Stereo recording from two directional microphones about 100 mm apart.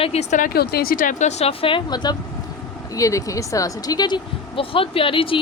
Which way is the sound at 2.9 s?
35° left (ahead or behind).